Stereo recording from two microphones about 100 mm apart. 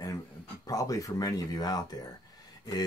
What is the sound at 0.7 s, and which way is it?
Speech, 35° left (ahead or behind).